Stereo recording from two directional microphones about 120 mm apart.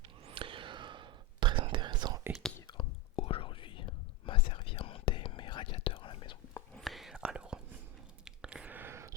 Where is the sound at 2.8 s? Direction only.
45° left (ahead or behind).